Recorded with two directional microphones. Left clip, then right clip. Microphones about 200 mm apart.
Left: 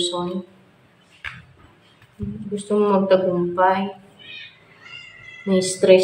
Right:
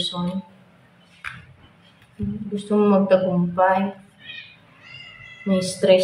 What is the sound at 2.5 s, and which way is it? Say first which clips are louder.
A woman's voice: even; 10° left (ahead or behind).